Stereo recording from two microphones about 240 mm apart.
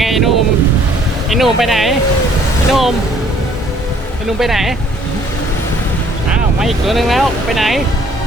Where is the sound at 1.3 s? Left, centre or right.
Centre.